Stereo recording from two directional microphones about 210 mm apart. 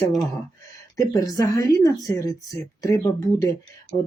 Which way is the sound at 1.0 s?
15° left (ahead or behind).